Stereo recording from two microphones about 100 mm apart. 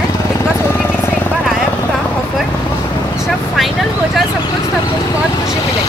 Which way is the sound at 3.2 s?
Centre (ahead or behind).